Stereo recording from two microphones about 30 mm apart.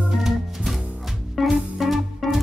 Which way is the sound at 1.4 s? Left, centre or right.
Centre.